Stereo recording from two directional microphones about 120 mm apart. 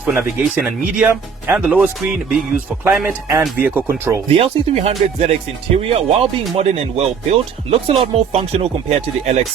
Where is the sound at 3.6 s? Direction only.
15° right (ahead or behind).